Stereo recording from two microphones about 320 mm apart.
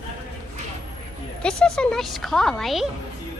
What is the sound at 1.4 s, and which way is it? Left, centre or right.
A woman's voice, centre.